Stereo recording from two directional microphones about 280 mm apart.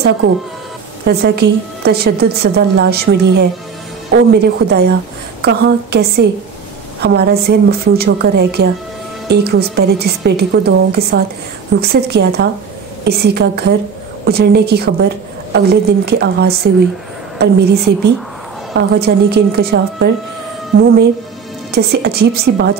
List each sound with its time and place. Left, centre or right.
1.0 s a woman's voice: right
21.7 s a woman's voice: right